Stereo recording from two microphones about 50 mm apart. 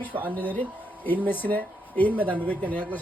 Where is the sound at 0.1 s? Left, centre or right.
Right.